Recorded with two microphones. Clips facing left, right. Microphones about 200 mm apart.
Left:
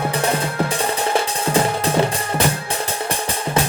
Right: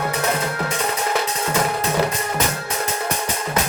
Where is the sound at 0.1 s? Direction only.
30° left (ahead or behind).